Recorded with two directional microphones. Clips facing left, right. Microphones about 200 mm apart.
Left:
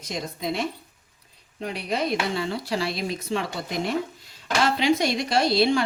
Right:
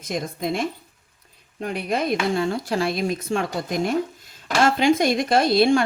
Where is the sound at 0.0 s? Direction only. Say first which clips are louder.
Right 4 dB; 50° right (ahead or behind).